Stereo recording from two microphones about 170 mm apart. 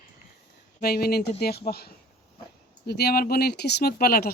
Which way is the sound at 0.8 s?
65° left (ahead or behind).